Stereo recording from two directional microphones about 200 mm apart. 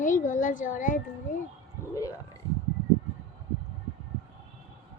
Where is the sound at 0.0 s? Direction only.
40° left (ahead or behind).